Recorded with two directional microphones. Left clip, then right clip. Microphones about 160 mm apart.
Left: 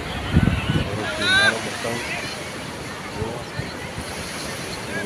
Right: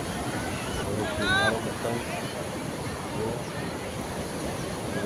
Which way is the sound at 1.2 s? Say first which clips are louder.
Left 8 dB; 30° right (ahead or behind).